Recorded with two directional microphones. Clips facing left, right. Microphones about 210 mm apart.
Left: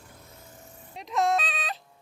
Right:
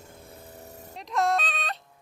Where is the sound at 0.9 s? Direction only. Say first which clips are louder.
Even; centre (ahead or behind).